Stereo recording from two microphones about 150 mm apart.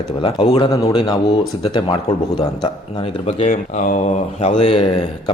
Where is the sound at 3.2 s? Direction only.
55° left (ahead or behind).